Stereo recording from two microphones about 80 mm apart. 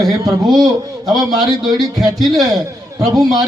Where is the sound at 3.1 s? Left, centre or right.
Right.